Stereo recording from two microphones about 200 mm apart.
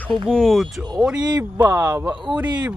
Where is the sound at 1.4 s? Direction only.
10° right (ahead or behind).